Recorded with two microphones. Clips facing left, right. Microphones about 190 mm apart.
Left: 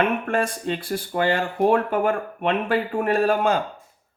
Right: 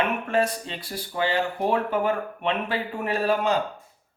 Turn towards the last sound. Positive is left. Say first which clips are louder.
# left 3 dB
turn(degrees=50)  # may be behind; listen again after turning